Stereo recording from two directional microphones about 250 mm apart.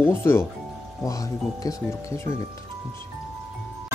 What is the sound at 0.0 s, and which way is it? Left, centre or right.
Speech, centre.